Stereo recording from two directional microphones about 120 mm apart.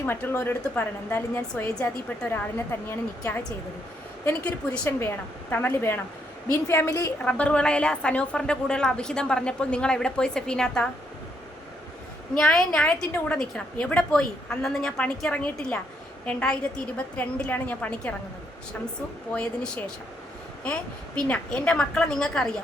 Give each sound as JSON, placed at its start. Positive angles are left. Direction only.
{"t": 0.0, "sound": "a woman's voice", "side_deg": 20}
{"t": 4.3, "sound": "a woman's voice", "side_deg": 15}
{"t": 7.2, "sound": "a woman's voice", "side_deg": 10}
{"t": 12.4, "sound": "a woman's voice", "side_deg": 5}
{"t": 19.3, "sound": "a woman's voice", "side_deg": 10}
{"t": 21.2, "sound": "a woman's voice", "side_deg": 10}